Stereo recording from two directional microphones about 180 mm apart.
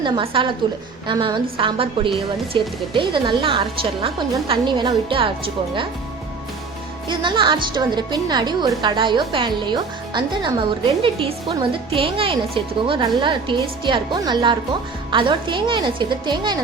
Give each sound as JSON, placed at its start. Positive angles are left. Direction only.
{"t": 0.0, "sound": "a woman's voice", "side_deg": -30}
{"t": 7.1, "sound": "a woman's voice", "side_deg": -25}